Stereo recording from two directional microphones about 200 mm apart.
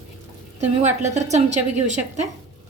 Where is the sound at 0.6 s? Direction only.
35° right (ahead or behind).